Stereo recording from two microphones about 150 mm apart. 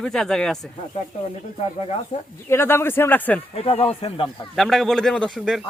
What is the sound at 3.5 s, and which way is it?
Speech, 40° left (ahead or behind).